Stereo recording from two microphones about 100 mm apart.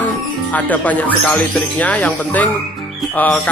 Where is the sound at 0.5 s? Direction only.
15° left (ahead or behind).